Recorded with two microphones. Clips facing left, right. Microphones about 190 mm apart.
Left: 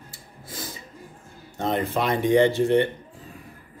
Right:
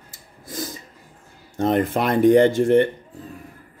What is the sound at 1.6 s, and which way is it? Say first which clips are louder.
Speech: right 5 dB; 55° right (ahead or behind).